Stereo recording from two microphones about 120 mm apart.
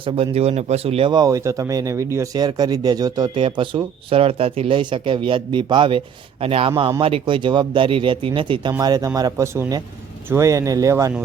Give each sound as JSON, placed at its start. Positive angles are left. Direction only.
{"t": 0.0, "sound": "speech", "side_deg": -55}
{"t": 1.1, "sound": "speech", "side_deg": -30}
{"t": 8.8, "sound": "speech", "side_deg": -35}